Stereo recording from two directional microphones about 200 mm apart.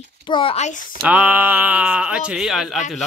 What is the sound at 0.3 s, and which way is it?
Speech, 25° left (ahead or behind).